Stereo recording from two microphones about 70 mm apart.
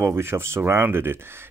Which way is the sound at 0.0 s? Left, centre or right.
Right.